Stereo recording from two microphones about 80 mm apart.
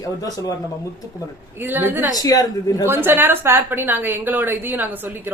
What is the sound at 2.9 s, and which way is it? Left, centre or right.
A woman's voice, right.